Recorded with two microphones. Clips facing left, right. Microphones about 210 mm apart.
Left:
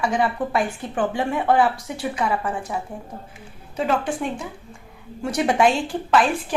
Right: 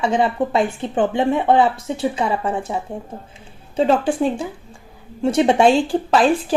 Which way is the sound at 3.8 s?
30° right (ahead or behind).